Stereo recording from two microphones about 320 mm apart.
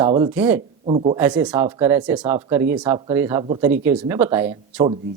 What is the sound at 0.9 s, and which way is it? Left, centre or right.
Speech, centre.